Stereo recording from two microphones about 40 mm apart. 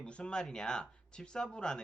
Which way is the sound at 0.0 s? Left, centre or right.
Left.